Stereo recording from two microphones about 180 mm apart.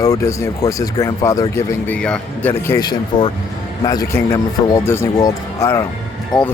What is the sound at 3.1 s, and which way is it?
Speech, 50° left (ahead or behind).